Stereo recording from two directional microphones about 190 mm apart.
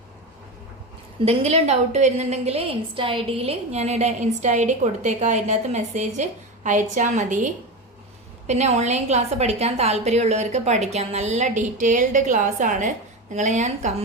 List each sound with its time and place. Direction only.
1.2 s a woman's voice: 30° right (ahead or behind)